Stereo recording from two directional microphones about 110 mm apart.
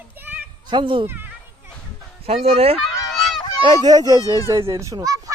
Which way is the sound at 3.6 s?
35° right (ahead or behind).